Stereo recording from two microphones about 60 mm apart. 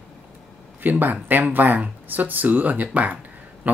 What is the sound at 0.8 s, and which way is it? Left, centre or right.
Speech, right.